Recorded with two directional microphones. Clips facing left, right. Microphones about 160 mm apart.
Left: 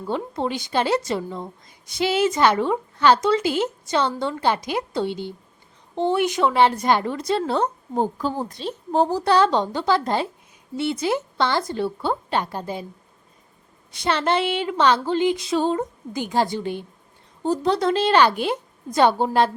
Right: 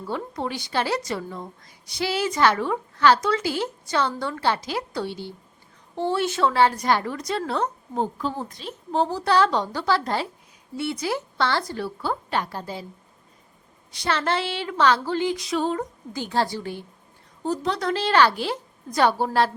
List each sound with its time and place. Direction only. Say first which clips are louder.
0.1 s a woman's voice: left 4 dB; 20° left (ahead or behind)
8.9 s a woman's voice: left 3 dB; 40° left (ahead or behind)
9.2 s a woman's voice: left 2 dB; 25° left (ahead or behind)
14.0 s a woman's voice: left 3 dB; 20° left (ahead or behind)
16.1 s a woman's voice: left 3 dB; 15° left (ahead or behind)